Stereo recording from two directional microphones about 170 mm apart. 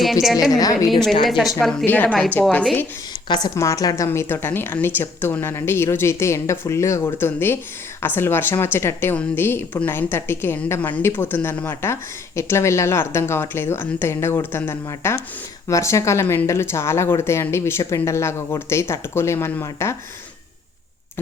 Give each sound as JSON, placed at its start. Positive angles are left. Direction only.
{"t": 0.0, "sound": "a woman's voice", "side_deg": 0}
{"t": 0.5, "sound": "a woman's voice", "side_deg": 20}
{"t": 0.9, "sound": "a woman's voice", "side_deg": 0}
{"t": 3.2, "sound": "speech", "side_deg": 25}